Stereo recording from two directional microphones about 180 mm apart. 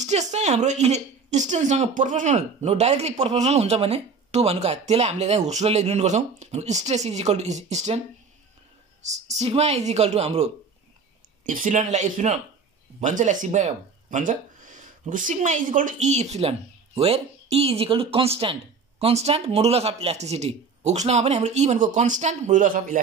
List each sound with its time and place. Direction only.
0.0 s speech: 40° right (ahead or behind)
9.4 s speech: 35° right (ahead or behind)